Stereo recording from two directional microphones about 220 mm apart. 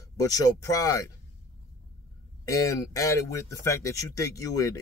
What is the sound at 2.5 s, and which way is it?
A man's voice, 15° left (ahead or behind).